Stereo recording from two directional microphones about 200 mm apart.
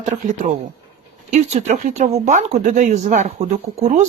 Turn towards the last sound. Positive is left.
turn(degrees=-35)  # may be behind; listen again after turning